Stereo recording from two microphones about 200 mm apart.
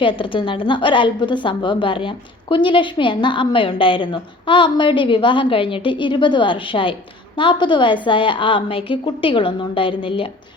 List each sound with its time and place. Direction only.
0.0 s a woman's voice: 25° left (ahead or behind)